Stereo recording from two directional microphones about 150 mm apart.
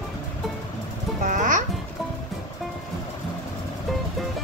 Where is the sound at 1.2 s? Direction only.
60° right (ahead or behind).